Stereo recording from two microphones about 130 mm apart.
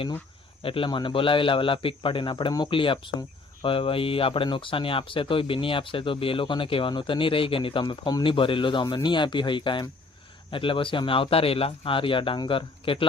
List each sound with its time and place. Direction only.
0.6 s speech: 45° left (ahead or behind)